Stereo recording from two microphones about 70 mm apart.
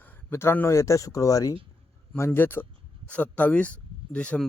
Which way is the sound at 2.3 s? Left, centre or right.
Left.